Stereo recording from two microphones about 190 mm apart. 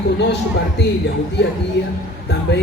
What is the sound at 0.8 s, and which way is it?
A woman's voice, 65° left (ahead or behind).